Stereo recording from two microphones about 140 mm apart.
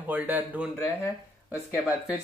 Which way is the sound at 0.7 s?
20° left (ahead or behind).